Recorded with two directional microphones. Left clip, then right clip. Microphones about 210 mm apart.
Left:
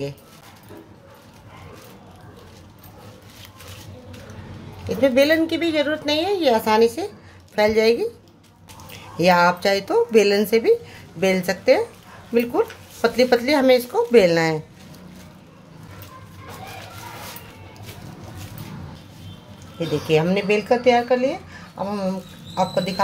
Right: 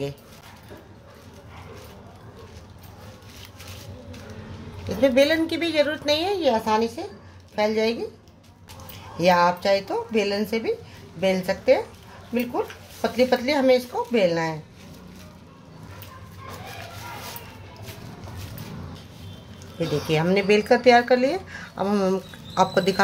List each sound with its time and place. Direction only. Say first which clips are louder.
4.8 s speech: left 2 dB; 10° left (ahead or behind)
6.4 s a woman's voice: left 5 dB; 20° left (ahead or behind)
20.1 s speech: left 1 dB; 5° right (ahead or behind); by 22.9 s 20° right (ahead or behind)